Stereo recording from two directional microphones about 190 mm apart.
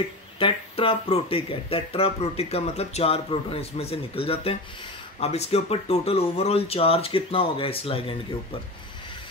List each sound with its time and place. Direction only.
0.4 s speech: 30° left (ahead or behind)